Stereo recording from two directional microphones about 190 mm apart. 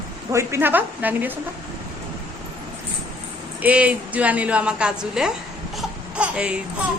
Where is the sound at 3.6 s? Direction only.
5° right (ahead or behind).